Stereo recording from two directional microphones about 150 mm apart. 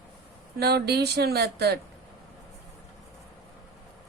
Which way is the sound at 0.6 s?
90° right.